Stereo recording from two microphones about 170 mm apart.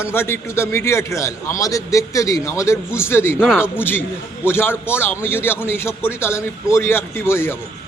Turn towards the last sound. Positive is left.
turn(degrees=15)  # may be behind; listen again after turning